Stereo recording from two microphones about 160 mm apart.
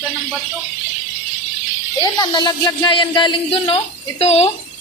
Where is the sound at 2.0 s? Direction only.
25° left (ahead or behind); by 4.5 s 40° left (ahead or behind).